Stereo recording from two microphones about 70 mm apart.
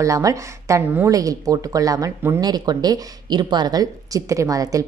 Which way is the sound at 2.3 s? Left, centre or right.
Right.